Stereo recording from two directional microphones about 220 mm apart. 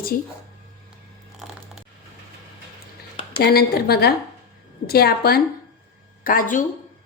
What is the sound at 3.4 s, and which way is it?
A woman's voice, 45° left (ahead or behind).